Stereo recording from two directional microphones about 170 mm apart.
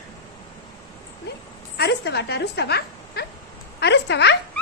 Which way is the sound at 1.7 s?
75° left (ahead or behind).